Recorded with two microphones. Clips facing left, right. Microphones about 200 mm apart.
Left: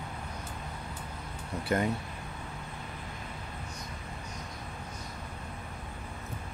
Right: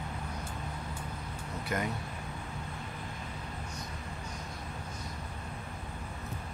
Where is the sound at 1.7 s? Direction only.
30° left (ahead or behind).